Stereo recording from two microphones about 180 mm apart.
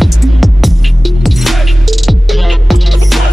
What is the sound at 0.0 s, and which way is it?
Music, centre (ahead or behind).